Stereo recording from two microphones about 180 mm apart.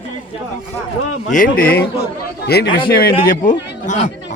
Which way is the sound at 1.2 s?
50° left (ahead or behind).